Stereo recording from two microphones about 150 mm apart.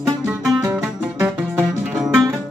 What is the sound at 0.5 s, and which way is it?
Music, 5° right (ahead or behind).